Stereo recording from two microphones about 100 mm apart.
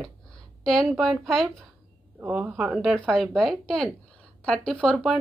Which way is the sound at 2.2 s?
15° right (ahead or behind).